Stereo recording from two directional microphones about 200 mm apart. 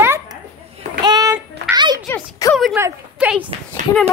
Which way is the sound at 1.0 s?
20° right (ahead or behind).